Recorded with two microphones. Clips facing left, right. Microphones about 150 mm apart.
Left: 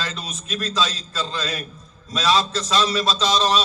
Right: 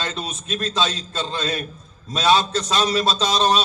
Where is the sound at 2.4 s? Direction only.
30° left (ahead or behind).